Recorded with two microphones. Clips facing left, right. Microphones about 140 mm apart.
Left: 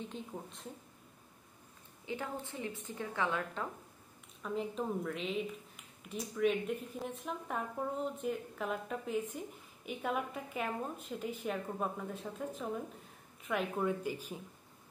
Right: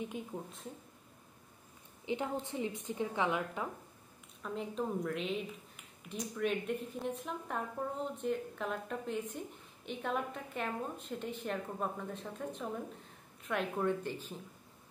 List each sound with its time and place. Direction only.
0.0 s a woman's voice: 5° right (ahead or behind)
2.0 s a woman's voice: 20° right (ahead or behind)
4.4 s a woman's voice: centre (ahead or behind)